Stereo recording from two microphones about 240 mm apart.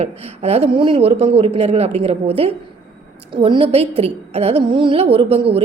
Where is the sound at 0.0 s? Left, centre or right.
Right.